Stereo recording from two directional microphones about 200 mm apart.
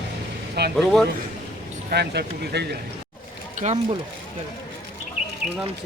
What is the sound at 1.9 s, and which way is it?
Speech, 55° right (ahead or behind).